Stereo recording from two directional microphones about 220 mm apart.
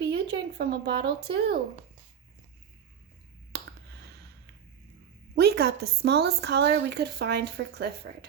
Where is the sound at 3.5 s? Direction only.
50° right (ahead or behind).